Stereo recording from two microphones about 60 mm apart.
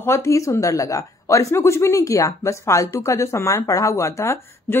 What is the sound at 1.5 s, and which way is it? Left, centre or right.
Speech, left.